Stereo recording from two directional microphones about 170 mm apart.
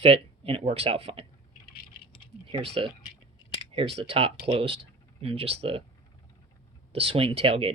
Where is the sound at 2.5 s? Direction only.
30° right (ahead or behind).